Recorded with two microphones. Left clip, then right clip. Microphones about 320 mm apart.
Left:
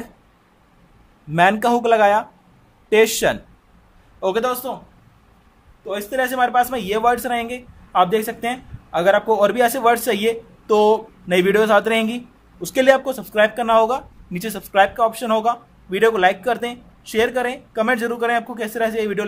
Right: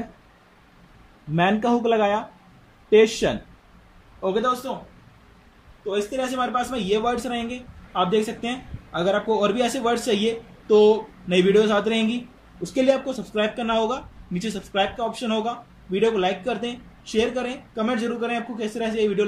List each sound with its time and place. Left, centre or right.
1.3 s a man's voice: left
5.9 s a man's voice: left